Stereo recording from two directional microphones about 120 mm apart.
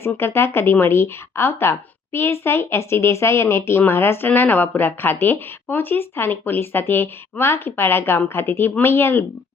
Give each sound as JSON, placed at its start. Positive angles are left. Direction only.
{"t": 0.0, "sound": "speech", "side_deg": 20}